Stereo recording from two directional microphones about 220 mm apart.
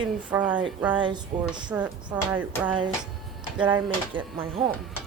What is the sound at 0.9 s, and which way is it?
Speech, 20° right (ahead or behind).